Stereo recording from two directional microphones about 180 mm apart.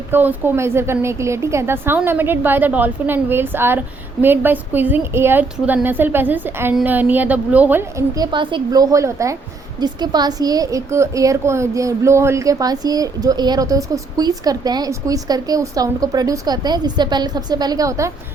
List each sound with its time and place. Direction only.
0.1 s a woman's voice: 10° right (ahead or behind)